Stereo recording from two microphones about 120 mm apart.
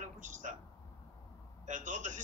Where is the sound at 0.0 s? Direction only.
90° right.